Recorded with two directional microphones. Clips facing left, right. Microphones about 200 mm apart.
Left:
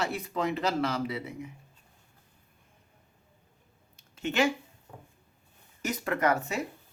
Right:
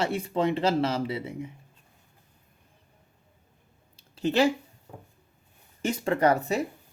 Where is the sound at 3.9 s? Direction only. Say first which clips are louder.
Right 4 dB; 35° right (ahead or behind).